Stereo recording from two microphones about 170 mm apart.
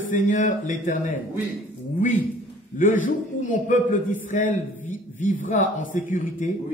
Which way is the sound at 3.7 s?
50° left (ahead or behind).